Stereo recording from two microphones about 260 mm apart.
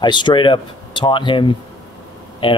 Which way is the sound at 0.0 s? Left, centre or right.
Centre.